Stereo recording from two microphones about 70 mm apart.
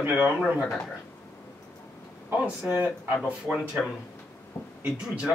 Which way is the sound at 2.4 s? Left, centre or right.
Right.